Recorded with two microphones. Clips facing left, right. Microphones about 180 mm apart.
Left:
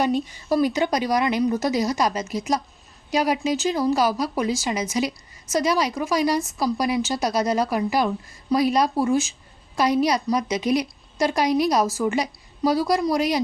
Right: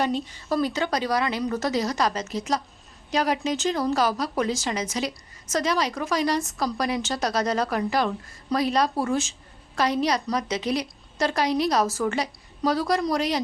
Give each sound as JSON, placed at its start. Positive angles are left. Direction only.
{"t": 0.0, "sound": "speech", "side_deg": 15}